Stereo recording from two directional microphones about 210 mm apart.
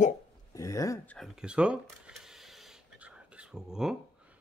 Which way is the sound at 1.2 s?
5° right (ahead or behind).